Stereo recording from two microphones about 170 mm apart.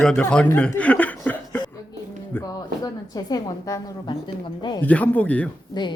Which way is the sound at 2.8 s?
25° left (ahead or behind).